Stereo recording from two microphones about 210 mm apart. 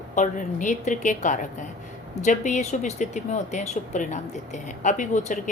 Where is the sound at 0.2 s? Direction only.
35° left (ahead or behind).